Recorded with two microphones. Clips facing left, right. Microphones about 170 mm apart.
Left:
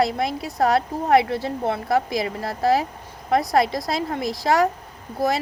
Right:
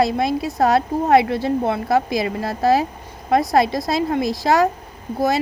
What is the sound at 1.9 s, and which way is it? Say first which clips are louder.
A woman's voice: right 2 dB; 25° right (ahead or behind).